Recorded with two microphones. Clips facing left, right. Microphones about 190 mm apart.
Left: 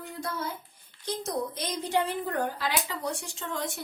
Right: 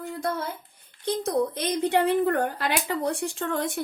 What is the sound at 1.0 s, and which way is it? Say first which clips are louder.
A woman's voice: right 7 dB; 60° right (ahead or behind).